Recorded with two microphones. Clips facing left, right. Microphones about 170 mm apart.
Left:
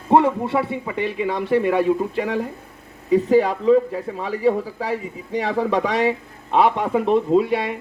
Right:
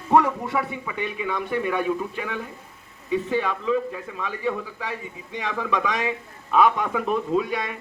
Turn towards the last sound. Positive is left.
turn(degrees=30)  # may be behind; listen again after turning